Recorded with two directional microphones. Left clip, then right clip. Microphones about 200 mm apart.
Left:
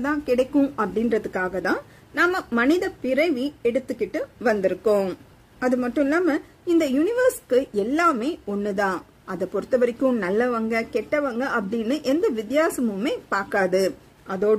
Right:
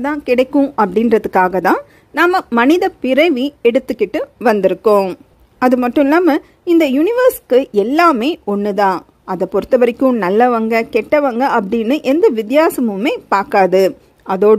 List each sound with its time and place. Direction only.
0.0 s speech: 30° right (ahead or behind)